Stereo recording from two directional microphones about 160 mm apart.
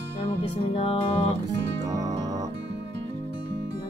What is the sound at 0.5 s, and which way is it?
Music, 40° left (ahead or behind).